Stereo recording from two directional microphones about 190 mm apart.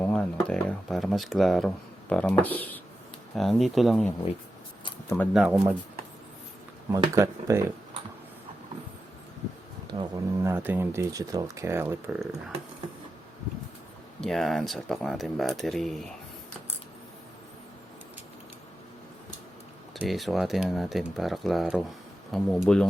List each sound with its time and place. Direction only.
0.0 s speech: 5° left (ahead or behind)
5.3 s speech: centre (ahead or behind)
6.9 s speech: 15° right (ahead or behind)
9.8 s speech: 15° right (ahead or behind)
14.2 s speech: centre (ahead or behind)
19.9 s speech: centre (ahead or behind)